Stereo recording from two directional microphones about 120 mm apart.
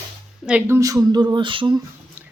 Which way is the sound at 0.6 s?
25° right (ahead or behind).